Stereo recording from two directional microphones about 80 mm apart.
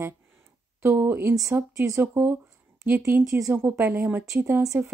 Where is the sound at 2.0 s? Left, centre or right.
Right.